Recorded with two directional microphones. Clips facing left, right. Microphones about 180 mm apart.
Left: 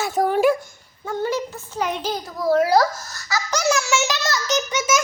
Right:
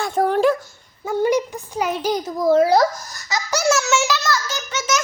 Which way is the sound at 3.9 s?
20° left (ahead or behind).